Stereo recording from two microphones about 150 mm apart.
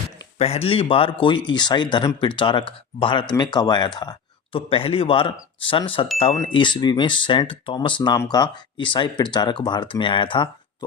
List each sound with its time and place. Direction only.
0.3 s speech: 45° left (ahead or behind)